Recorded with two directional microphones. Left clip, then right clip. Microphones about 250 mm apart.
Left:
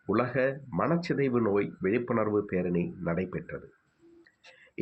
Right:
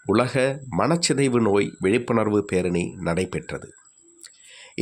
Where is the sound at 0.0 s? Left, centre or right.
Right.